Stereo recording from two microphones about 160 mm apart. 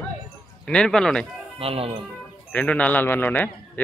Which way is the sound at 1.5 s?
35° right (ahead or behind).